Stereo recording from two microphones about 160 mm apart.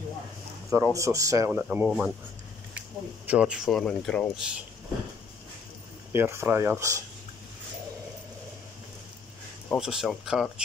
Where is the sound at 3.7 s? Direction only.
5° left (ahead or behind).